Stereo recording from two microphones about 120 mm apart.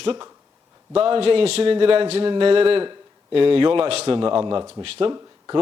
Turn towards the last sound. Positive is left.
turn(degrees=-30)  # may be behind; listen again after turning